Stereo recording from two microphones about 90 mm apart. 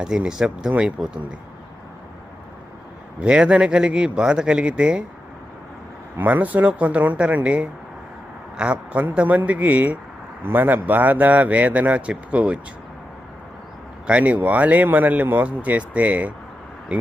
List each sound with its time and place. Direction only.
0.0 s speech: 10° right (ahead or behind)
3.2 s speech: 10° right (ahead or behind)
6.1 s speech: 20° right (ahead or behind)
14.1 s speech: 15° right (ahead or behind)